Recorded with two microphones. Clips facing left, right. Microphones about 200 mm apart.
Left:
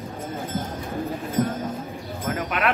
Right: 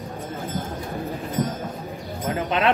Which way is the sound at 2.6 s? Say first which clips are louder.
Right 4 dB; 25° right (ahead or behind).